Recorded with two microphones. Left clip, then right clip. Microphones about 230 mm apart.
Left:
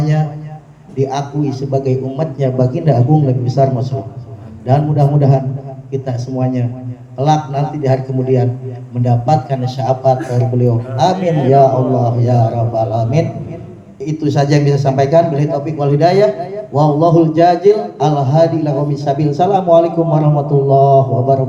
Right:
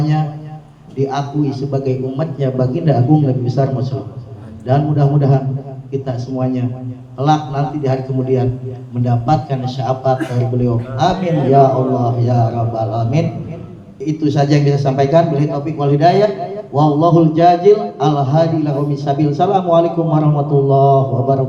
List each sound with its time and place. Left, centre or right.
0.0 s a man's voice: left